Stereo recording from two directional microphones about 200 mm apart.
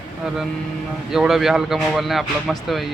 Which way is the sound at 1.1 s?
Centre (ahead or behind).